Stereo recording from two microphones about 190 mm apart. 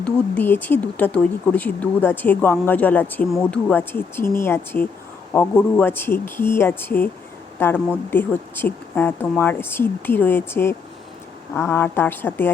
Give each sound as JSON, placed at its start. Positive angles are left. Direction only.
{"t": 0.0, "sound": "speech", "side_deg": 10}